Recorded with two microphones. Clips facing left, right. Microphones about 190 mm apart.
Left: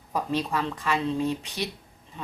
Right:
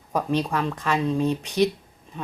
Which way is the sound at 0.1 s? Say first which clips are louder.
Right 3 dB; 20° right (ahead or behind).